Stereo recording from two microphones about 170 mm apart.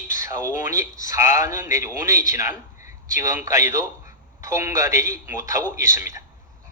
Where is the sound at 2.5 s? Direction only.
50° left (ahead or behind).